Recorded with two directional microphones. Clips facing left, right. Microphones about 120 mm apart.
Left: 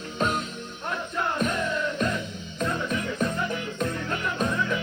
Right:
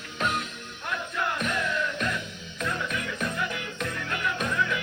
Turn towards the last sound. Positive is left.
turn(degrees=30)  # may be behind; listen again after turning